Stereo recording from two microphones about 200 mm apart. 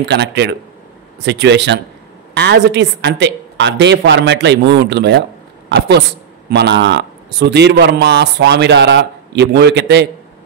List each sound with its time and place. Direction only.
0.0 s a man's voice: 55° right (ahead or behind)